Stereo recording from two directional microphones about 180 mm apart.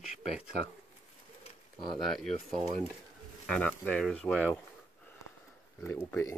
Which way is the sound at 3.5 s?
5° left (ahead or behind).